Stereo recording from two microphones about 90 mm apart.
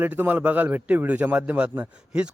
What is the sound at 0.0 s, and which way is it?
A man's voice, 20° right (ahead or behind).